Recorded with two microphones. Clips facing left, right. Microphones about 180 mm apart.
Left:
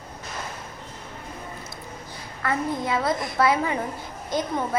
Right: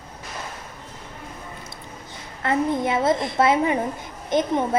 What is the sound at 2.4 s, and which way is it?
A woman's voice, 25° right (ahead or behind).